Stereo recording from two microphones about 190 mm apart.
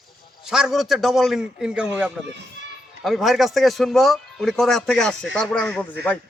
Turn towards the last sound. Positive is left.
turn(degrees=5)  # may be behind; listen again after turning